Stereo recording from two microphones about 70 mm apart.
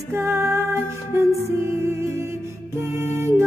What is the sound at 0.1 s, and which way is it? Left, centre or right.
Music, right.